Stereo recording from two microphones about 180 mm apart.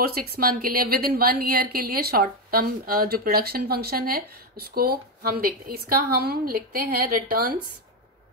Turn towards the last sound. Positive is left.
turn(degrees=-50)  # may be behind; listen again after turning